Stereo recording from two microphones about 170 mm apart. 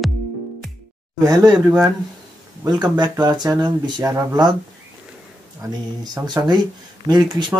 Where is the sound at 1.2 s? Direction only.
20° right (ahead or behind).